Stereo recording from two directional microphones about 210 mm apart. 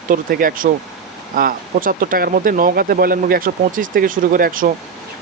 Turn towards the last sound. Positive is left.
turn(degrees=-40)  # may be behind; listen again after turning